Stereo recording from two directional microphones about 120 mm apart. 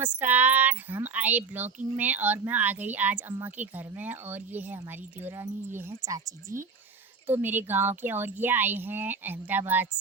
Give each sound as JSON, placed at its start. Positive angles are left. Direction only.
{"t": 0.0, "sound": "speech", "side_deg": -15}